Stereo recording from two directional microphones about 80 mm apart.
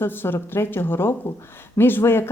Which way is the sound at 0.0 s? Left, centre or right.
Left.